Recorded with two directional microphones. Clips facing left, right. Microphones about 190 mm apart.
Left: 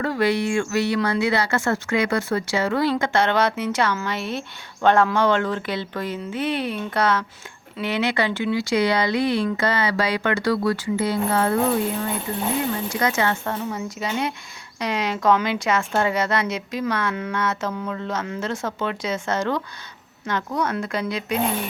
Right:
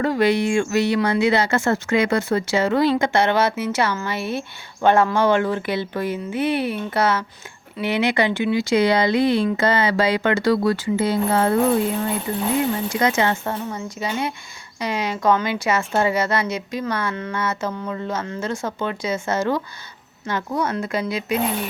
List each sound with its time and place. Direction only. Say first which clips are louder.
0.0 s speech: right 3 dB; 20° right (ahead or behind)
2.9 s speech: right 2 dB; 10° right (ahead or behind); by 11.5 s 30° right (ahead or behind)
13.0 s speech: right 2 dB; 20° right (ahead or behind)
13.5 s speech: even; centre (ahead or behind)